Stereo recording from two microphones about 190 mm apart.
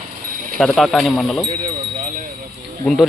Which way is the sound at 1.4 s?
35° right (ahead or behind).